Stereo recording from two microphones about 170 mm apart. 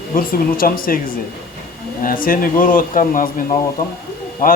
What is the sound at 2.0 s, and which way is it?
Speech, 55° left (ahead or behind).